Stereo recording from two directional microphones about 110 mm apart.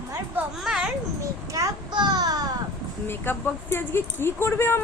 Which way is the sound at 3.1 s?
20° left (ahead or behind).